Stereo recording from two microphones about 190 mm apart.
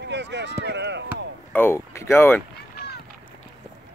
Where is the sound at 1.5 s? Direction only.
10° left (ahead or behind).